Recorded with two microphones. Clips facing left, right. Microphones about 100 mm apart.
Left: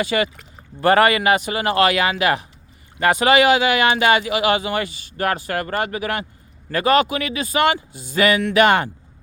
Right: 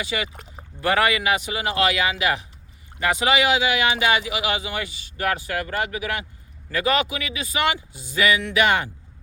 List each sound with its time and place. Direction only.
0.0 s speech: 50° left (ahead or behind)